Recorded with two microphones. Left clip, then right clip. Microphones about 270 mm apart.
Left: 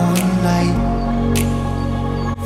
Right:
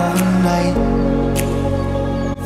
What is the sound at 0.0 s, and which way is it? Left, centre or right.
Music, centre.